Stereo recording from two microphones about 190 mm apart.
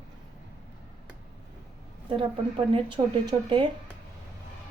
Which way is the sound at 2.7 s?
25° right (ahead or behind).